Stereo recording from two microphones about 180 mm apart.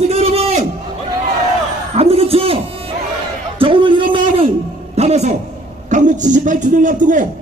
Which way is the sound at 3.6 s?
30° right (ahead or behind).